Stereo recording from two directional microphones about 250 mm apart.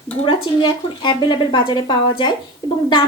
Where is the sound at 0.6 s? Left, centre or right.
Centre.